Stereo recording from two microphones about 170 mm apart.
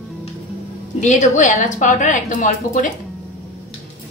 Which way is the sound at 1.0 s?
45° left (ahead or behind).